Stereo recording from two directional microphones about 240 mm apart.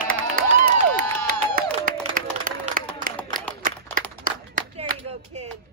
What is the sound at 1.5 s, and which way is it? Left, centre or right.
Applause, right.